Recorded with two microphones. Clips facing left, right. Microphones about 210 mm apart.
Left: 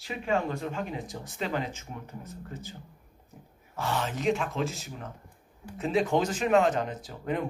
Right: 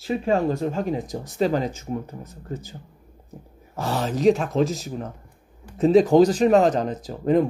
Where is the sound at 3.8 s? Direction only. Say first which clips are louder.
Right 8 dB; 40° right (ahead or behind).